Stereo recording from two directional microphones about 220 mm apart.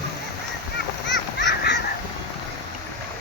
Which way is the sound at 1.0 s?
55° left (ahead or behind).